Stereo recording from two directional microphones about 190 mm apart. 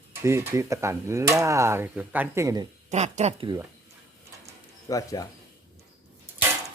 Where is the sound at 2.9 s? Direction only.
35° right (ahead or behind).